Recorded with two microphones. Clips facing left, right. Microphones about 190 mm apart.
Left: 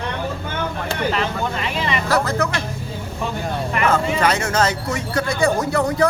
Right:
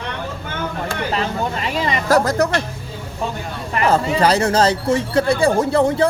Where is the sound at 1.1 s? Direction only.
40° right (ahead or behind).